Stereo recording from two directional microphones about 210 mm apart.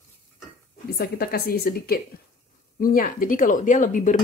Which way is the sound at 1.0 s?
50° left (ahead or behind).